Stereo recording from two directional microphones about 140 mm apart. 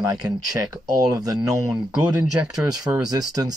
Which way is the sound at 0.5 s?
30° right (ahead or behind).